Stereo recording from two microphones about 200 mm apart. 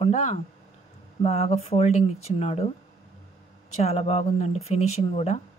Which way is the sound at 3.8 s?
35° left (ahead or behind).